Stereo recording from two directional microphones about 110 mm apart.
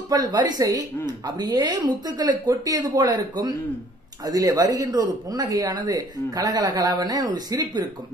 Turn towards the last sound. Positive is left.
turn(degrees=-35)  # may be behind; listen again after turning